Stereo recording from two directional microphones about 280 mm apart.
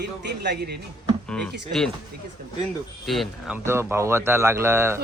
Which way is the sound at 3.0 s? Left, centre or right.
Centre.